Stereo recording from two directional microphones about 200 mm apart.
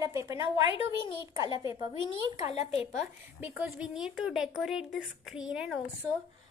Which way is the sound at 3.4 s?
5° right (ahead or behind).